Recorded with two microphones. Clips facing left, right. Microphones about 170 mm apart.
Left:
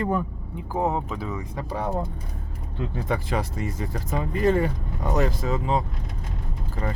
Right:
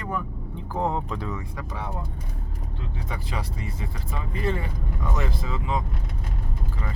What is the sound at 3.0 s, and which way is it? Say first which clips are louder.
Speech: left 7 dB; 55° left (ahead or behind).